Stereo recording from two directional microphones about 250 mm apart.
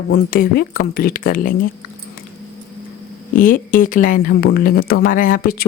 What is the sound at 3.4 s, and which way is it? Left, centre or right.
Speech, left.